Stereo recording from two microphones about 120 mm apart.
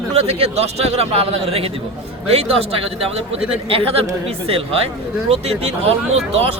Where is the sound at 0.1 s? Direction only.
55° right (ahead or behind).